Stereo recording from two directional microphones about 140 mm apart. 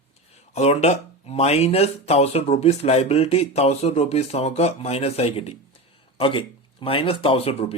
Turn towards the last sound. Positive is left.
turn(degrees=45)  # may be behind; listen again after turning